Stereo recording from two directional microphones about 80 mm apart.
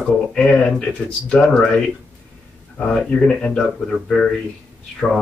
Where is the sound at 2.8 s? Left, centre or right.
Centre.